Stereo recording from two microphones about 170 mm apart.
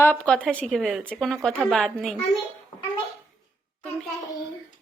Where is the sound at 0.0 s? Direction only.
5° left (ahead or behind).